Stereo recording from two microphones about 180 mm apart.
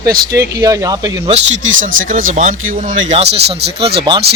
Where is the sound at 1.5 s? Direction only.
90° right.